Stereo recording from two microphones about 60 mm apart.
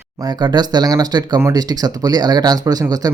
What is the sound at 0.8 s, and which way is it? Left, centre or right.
Speech, right.